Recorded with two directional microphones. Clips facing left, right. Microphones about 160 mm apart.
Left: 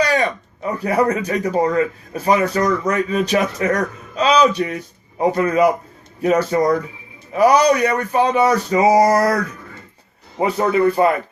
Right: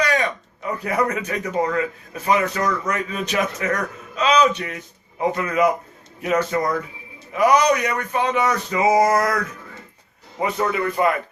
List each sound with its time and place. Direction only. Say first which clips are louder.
0.0 s speech: left 4 dB; 30° left (ahead or behind)